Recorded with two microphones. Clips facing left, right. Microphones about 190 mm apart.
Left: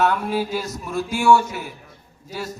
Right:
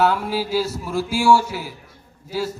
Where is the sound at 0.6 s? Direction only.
10° right (ahead or behind).